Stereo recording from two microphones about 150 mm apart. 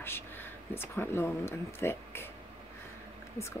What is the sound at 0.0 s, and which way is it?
Speech, 15° left (ahead or behind).